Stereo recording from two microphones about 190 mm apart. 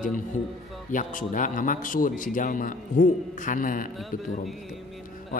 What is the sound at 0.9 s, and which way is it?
Speech, 45° left (ahead or behind).